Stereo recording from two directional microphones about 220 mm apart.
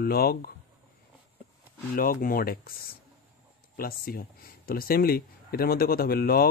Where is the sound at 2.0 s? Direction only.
40° left (ahead or behind).